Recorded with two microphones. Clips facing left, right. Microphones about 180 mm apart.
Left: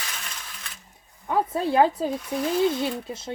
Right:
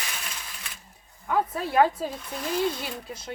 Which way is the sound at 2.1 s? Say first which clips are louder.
Left 5 dB; 5° left (ahead or behind).